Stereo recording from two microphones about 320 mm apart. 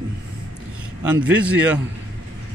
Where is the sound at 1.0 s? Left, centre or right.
Centre.